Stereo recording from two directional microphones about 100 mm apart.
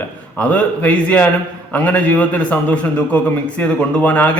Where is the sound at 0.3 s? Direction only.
15° left (ahead or behind).